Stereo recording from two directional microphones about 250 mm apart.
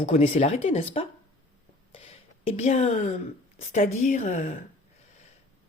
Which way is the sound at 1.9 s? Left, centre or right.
Left.